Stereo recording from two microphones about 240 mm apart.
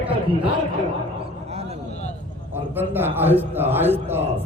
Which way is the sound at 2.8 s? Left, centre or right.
Centre.